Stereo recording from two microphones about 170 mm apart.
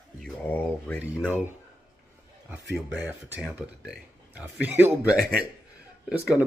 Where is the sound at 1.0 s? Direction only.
10° right (ahead or behind).